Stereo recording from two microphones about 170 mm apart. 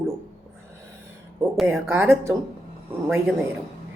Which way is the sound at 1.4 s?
10° right (ahead or behind).